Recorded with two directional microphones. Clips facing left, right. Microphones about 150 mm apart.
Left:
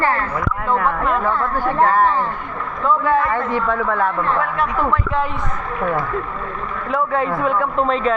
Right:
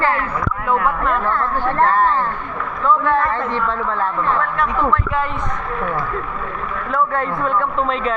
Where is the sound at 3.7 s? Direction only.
50° left (ahead or behind).